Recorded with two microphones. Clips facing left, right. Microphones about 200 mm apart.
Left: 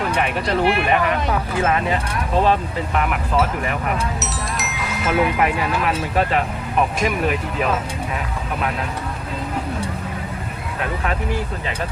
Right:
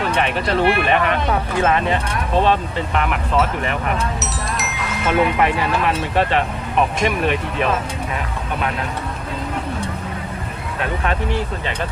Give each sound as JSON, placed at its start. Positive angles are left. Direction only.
{"t": 0.3, "sound": "speech", "side_deg": -25}
{"t": 0.6, "sound": "speech", "side_deg": 0}
{"t": 1.9, "sound": "speech", "side_deg": 5}